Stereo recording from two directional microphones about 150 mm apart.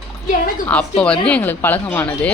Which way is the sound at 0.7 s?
10° left (ahead or behind).